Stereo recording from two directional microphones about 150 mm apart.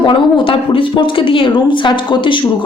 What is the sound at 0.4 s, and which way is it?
A woman's voice, 35° left (ahead or behind).